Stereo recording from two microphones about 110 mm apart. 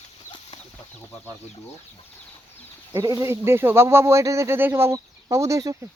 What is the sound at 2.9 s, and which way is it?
Speech, 30° right (ahead or behind).